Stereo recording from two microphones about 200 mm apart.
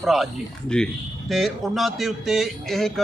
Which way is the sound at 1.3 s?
Centre (ahead or behind).